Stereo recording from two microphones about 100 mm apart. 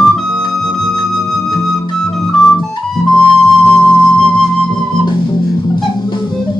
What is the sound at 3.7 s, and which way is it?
Flute, 5° left (ahead or behind).